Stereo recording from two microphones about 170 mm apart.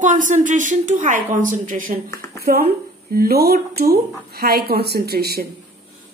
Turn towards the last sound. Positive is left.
turn(degrees=-65)  # may be behind; listen again after turning